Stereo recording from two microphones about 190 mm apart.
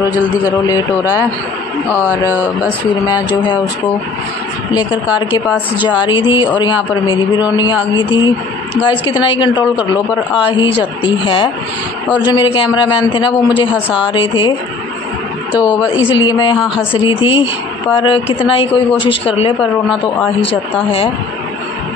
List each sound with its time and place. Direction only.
0.0 s a woman's voice: 20° left (ahead or behind)
3.0 s a woman's voice: 20° left (ahead or behind)
4.7 s a woman's voice: 25° left (ahead or behind)
15.5 s a woman's voice: 25° left (ahead or behind)